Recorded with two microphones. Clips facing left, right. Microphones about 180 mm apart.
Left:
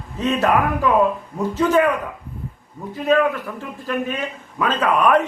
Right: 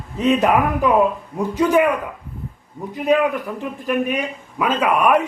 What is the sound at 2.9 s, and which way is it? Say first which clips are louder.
A man's voice: even; 15° right (ahead or behind).